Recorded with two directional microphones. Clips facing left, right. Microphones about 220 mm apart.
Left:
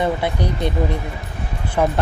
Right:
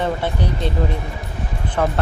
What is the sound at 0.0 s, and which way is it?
Speech, 10° left (ahead or behind).